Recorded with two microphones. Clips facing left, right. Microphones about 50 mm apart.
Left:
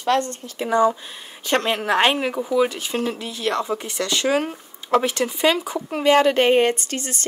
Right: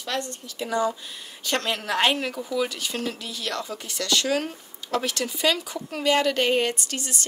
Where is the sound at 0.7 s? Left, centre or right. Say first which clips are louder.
Left 7 dB; left.